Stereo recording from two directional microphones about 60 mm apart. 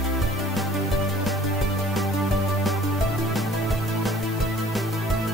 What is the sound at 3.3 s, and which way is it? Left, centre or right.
Music, centre.